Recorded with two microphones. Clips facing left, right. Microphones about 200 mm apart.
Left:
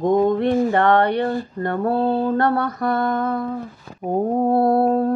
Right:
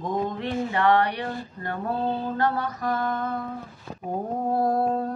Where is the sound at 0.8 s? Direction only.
60° left (ahead or behind).